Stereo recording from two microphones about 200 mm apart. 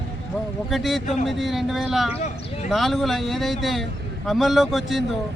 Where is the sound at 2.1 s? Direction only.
35° left (ahead or behind).